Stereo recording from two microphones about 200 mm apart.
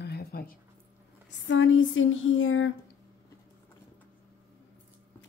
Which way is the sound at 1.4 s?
70° left (ahead or behind).